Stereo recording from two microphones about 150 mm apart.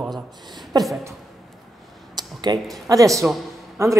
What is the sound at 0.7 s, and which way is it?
Speech, 25° right (ahead or behind).